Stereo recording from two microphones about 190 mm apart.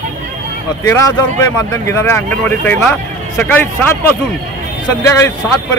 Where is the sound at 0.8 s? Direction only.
15° left (ahead or behind).